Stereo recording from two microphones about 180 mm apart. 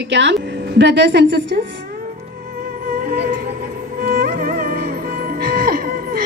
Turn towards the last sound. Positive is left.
turn(degrees=-55)  # may be behind; listen again after turning